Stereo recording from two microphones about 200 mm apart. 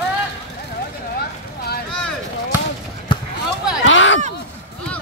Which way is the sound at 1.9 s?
5° left (ahead or behind).